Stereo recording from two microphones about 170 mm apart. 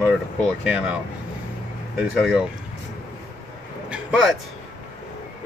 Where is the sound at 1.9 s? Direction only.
Centre (ahead or behind).